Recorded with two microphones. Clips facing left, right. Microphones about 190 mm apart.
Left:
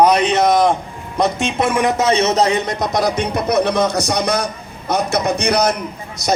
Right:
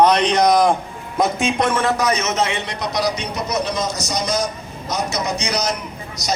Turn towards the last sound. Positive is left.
turn(degrees=55)  # may be behind; listen again after turning